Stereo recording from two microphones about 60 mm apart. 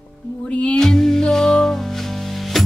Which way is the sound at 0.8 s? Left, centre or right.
Centre.